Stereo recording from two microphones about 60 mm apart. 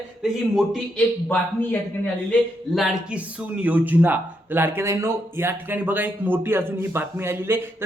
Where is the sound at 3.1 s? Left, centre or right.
Right.